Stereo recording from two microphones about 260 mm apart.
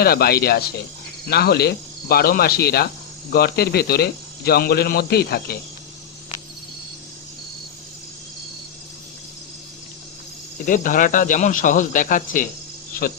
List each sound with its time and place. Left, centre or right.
0.0 s speech: left
10.7 s speech: left